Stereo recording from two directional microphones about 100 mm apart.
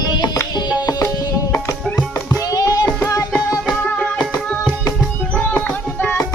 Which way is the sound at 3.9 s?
5° left (ahead or behind).